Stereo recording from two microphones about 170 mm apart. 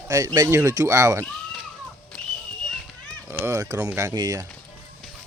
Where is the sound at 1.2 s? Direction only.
Centre (ahead or behind).